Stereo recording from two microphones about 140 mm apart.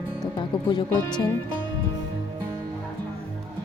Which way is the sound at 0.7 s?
30° left (ahead or behind).